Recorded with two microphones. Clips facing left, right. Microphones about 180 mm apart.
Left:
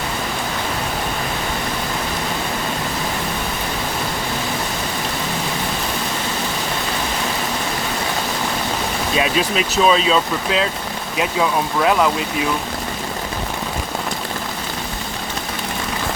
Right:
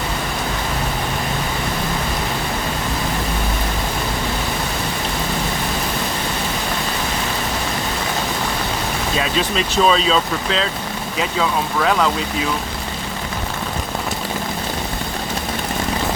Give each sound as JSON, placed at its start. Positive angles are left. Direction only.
{"t": 9.1, "sound": "speech", "side_deg": 10}